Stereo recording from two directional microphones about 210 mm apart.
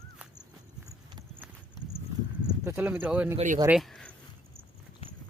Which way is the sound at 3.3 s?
35° right (ahead or behind).